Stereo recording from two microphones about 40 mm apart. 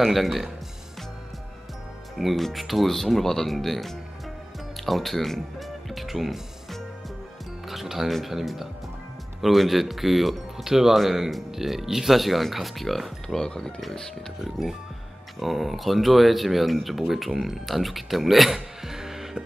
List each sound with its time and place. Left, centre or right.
0.0 s speech: centre
2.1 s speech: centre
13.3 s speech: centre
14.4 s speech: centre